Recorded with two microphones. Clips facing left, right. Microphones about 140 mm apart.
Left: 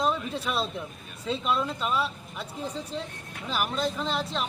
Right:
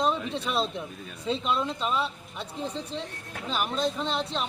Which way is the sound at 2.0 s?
25° right (ahead or behind).